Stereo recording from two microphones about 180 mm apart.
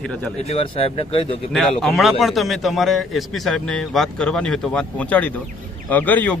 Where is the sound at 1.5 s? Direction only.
Centre (ahead or behind).